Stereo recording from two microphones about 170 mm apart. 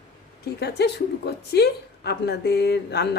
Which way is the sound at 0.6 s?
75° left (ahead or behind).